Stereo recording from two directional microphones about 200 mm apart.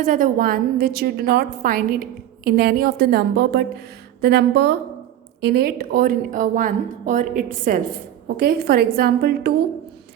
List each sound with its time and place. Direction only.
0.0 s a woman's voice: 40° right (ahead or behind)